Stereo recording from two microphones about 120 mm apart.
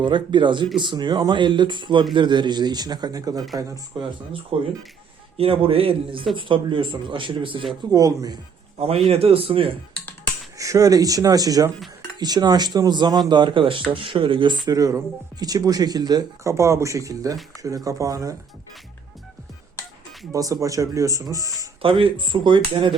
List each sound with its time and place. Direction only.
0.0 s speech: 40° right (ahead or behind)
4.5 s speech: 50° right (ahead or behind)
7.9 s speech: 30° right (ahead or behind)
9.0 s speech: 55° right (ahead or behind)
10.6 s speech: 30° right (ahead or behind)
20.3 s speech: 30° right (ahead or behind)
21.8 s speech: 45° right (ahead or behind)